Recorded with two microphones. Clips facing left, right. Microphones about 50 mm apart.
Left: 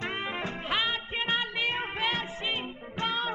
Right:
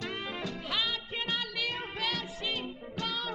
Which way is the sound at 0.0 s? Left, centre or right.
Left.